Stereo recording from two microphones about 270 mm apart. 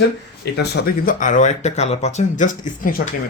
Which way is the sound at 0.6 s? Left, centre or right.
Left.